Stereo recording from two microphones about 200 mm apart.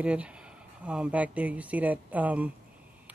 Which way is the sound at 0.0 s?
5° right (ahead or behind).